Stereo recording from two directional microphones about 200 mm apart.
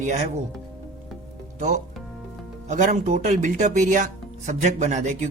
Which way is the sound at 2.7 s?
35° right (ahead or behind).